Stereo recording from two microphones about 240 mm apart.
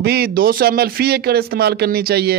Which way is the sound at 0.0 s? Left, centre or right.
Right.